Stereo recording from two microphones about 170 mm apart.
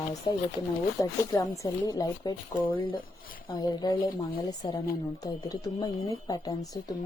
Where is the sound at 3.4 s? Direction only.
25° left (ahead or behind).